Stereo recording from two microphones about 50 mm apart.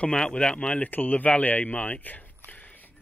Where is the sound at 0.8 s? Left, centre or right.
Left.